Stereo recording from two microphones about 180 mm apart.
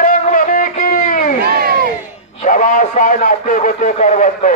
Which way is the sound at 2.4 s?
45° left (ahead or behind).